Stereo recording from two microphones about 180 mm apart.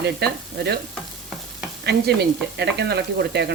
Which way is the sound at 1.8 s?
65° right (ahead or behind).